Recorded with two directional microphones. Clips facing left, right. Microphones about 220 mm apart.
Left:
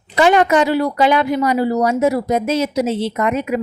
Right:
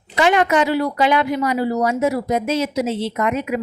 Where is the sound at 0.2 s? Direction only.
35° left (ahead or behind).